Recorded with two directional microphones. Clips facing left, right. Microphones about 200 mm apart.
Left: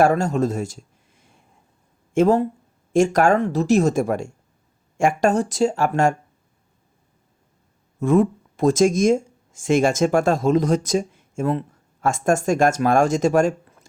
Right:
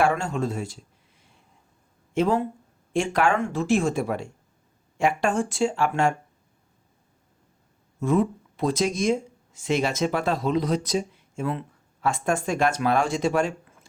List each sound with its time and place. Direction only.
0.0 s a man's voice: 40° left (ahead or behind)
7.9 s speech: 50° left (ahead or behind)